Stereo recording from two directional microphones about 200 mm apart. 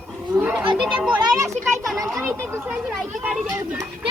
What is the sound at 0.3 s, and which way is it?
Wild animals, 10° right (ahead or behind).